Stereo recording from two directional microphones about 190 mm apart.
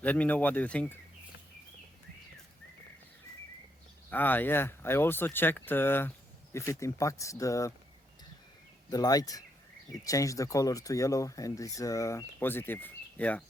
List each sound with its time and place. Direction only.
0.0 s speech: 10° left (ahead or behind)
4.1 s speech: 10° left (ahead or behind)
8.9 s speech: 20° left (ahead or behind)